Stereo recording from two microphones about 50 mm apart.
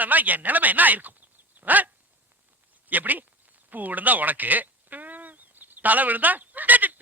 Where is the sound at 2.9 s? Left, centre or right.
Right.